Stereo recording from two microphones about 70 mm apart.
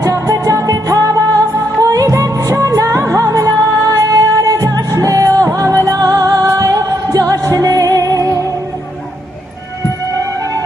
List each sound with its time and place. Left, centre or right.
0.0 s music: right